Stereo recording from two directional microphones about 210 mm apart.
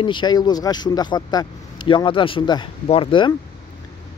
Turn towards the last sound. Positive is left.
turn(degrees=25)  # may be behind; listen again after turning